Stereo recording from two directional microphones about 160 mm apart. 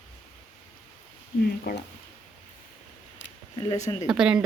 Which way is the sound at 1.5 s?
70° left (ahead or behind).